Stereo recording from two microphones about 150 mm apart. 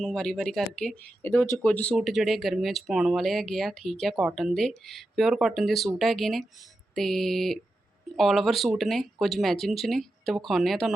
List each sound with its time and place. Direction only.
0.0 s speech: 5° left (ahead or behind)
1.2 s speech: 15° left (ahead or behind)
2.0 s speech: centre (ahead or behind)